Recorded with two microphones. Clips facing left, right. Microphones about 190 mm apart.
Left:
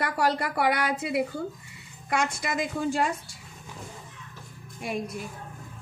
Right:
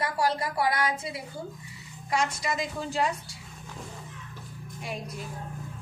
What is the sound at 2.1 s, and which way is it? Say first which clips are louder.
A woman's voice: left 1 dB; 55° left (ahead or behind).